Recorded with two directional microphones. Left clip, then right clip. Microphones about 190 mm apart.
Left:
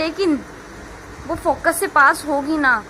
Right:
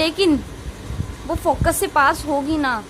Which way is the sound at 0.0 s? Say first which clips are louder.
Right 2 dB; 20° right (ahead or behind).